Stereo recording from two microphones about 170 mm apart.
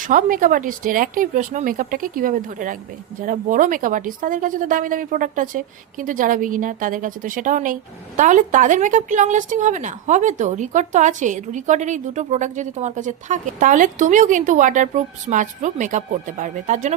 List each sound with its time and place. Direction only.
0.0 s a woman's voice: 50° right (ahead or behind)